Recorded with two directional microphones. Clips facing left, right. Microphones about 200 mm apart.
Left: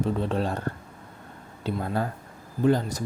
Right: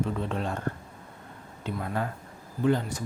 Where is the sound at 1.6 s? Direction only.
35° left (ahead or behind).